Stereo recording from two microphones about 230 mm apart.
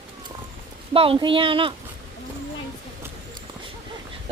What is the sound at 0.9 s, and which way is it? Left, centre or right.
Speech, right.